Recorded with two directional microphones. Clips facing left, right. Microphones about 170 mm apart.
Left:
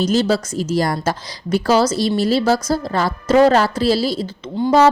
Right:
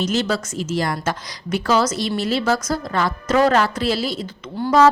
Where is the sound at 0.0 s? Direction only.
35° left (ahead or behind).